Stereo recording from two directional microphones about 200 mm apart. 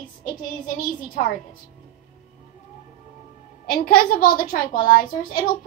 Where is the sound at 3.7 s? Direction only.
45° left (ahead or behind).